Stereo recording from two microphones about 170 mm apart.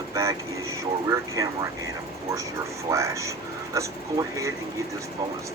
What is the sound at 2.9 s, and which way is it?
Speech, 20° right (ahead or behind).